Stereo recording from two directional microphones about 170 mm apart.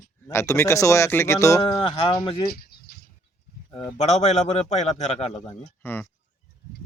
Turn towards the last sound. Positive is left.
turn(degrees=10)  # may be behind; listen again after turning